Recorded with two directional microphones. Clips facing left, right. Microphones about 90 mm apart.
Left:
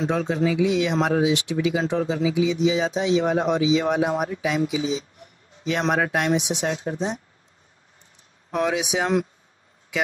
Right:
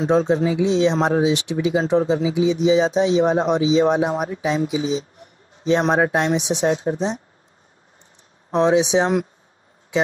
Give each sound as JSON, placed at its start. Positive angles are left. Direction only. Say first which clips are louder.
{"t": 0.0, "sound": "speech", "louder": "right 5 dB", "side_deg": -25}
{"t": 8.5, "sound": "speech", "louder": "right 7 dB", "side_deg": -25}